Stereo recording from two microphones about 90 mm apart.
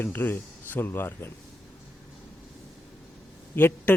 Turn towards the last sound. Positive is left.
turn(degrees=25)  # may be behind; listen again after turning